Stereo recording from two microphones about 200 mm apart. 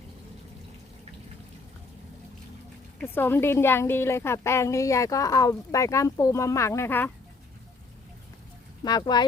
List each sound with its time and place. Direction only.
3.0 s a woman's voice: 10° left (ahead or behind)
8.8 s speech: 20° left (ahead or behind)